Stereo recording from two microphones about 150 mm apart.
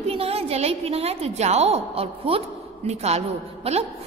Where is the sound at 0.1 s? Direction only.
40° right (ahead or behind).